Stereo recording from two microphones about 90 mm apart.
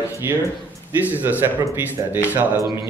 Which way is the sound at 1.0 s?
20° right (ahead or behind).